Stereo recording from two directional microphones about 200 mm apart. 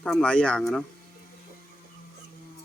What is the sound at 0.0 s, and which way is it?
Speech, 5° left (ahead or behind).